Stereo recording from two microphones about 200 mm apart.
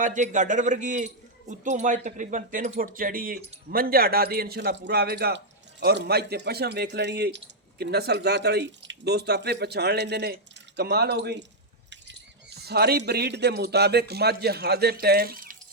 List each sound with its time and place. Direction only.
0.0 s a man's voice: 40° right (ahead or behind)